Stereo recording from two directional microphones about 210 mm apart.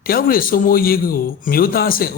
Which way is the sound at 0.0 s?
45° left (ahead or behind).